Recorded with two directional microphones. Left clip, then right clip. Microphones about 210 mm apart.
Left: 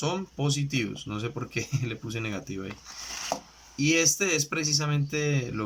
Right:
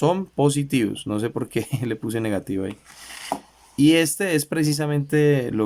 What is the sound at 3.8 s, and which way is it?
Speech, 40° right (ahead or behind).